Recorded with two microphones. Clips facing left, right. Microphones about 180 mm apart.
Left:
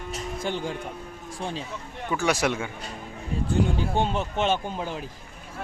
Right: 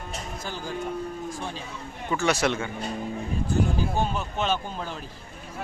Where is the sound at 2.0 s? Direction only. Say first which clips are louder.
Even; 10° left (ahead or behind).